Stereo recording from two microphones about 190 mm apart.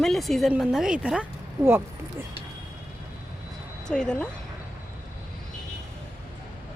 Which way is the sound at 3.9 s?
5° left (ahead or behind).